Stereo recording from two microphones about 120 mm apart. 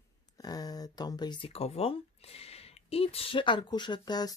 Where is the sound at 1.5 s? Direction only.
55° left (ahead or behind).